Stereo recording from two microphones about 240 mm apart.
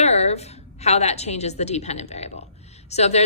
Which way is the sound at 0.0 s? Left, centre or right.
Left.